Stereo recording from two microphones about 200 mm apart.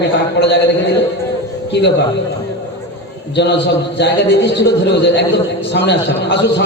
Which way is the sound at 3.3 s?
60° left (ahead or behind).